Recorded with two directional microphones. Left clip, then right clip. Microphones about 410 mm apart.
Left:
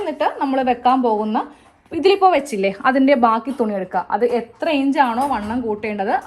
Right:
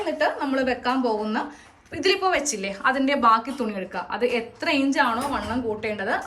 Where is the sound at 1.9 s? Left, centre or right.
Centre.